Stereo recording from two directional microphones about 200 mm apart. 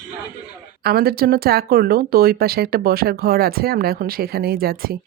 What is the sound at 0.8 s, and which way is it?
Speech, 50° right (ahead or behind).